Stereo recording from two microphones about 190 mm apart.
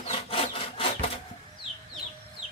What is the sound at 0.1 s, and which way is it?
Wood, 30° left (ahead or behind).